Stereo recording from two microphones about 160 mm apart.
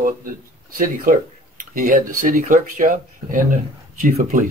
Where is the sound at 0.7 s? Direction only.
60° right (ahead or behind).